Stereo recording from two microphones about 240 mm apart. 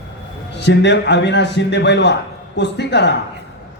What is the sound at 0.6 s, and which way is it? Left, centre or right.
A man's voice, left.